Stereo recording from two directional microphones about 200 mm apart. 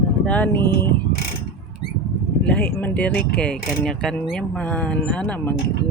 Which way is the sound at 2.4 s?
5° left (ahead or behind).